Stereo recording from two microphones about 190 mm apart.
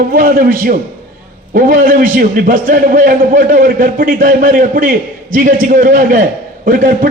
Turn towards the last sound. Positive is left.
turn(degrees=-45)  # may be behind; listen again after turning